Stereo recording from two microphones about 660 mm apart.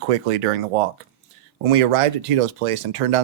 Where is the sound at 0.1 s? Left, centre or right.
Right.